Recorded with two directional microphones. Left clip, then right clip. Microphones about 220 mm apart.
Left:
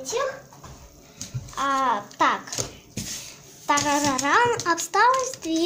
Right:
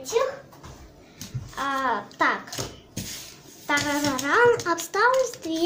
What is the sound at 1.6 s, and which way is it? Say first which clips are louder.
Speech: left 3 dB; 25° left (ahead or behind).